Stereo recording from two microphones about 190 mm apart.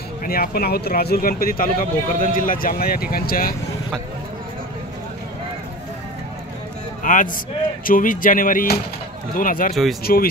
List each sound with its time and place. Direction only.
0.2 s speech: 50° left (ahead or behind)
7.0 s a sound: 45° left (ahead or behind)
7.8 s speech: 45° left (ahead or behind)